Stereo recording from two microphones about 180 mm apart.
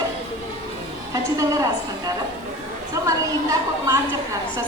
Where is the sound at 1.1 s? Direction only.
20° right (ahead or behind).